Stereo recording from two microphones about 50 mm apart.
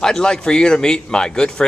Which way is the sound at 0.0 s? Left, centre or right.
Centre.